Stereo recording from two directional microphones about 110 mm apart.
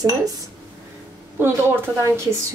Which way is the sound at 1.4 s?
20° right (ahead or behind).